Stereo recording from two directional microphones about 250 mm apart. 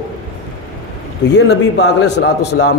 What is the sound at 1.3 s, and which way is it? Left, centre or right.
Speech, left.